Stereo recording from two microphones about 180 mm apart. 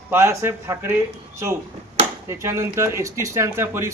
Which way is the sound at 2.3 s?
15° right (ahead or behind).